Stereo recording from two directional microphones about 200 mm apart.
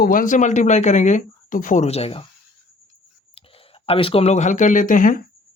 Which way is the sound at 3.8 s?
30° left (ahead or behind).